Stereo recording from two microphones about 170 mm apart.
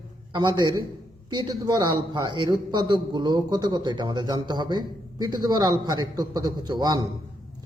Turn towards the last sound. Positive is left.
turn(degrees=-25)  # may be behind; listen again after turning